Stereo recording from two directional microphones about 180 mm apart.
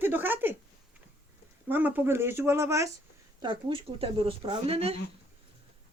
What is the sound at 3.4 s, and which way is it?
Speech, 25° right (ahead or behind).